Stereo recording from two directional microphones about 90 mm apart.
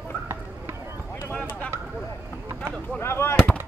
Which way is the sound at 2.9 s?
25° left (ahead or behind).